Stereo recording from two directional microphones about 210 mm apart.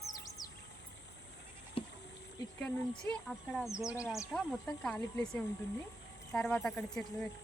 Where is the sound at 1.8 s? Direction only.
25° left (ahead or behind).